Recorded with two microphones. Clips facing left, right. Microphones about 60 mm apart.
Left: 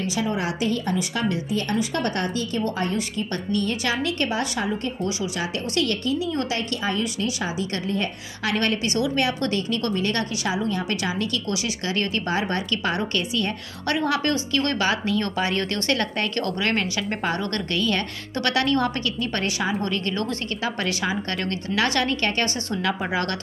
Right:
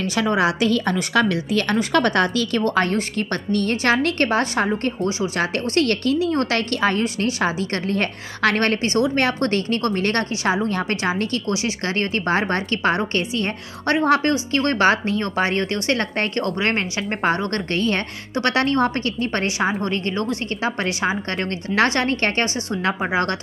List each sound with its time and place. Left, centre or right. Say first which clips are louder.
0.0 s a woman's voice: right 6 dB; right
5.4 s a woman's voice: right 6 dB; right
7.4 s a woman's voice: right 5 dB; right